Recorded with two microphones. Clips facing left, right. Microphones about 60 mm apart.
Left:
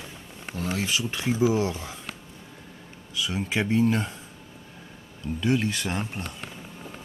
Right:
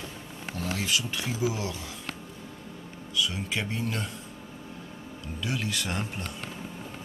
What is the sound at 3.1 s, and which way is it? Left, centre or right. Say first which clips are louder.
Speech: left 2 dB; centre.